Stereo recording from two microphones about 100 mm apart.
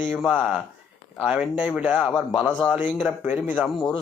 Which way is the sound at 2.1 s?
10° left (ahead or behind).